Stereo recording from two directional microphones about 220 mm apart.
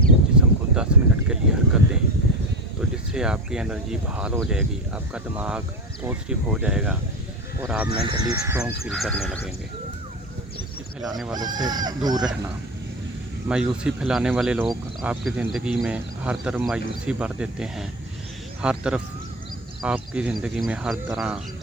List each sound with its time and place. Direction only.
0.0 s a sound: 5° right (ahead or behind)
3.1 s speech: 5° right (ahead or behind)
8.0 s speech: 20° right (ahead or behind); by 9.5 s 5° left (ahead or behind)
11.3 s speech: 20° right (ahead or behind)
13.5 s speech: 5° right (ahead or behind)